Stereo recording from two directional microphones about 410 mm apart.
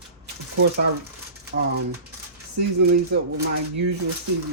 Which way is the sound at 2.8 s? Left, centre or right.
Right.